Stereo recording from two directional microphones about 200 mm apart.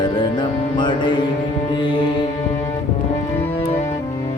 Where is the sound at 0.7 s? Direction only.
25° left (ahead or behind).